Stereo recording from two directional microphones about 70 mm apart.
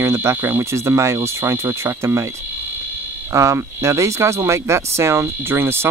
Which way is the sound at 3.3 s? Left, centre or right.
Right.